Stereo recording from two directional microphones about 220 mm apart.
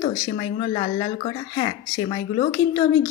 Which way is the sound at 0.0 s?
30° left (ahead or behind).